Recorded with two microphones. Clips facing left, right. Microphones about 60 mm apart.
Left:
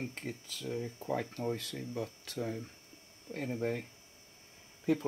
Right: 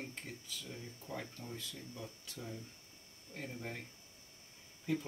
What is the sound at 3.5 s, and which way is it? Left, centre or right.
Speech, left.